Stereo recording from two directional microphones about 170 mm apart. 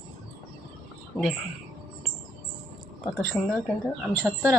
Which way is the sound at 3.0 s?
Centre (ahead or behind).